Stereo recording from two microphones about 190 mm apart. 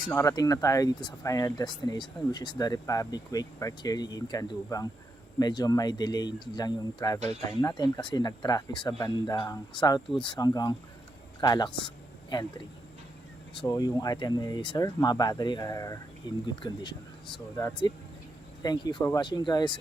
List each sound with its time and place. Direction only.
0.0 s speech: 15° left (ahead or behind)
13.6 s speech: 20° left (ahead or behind)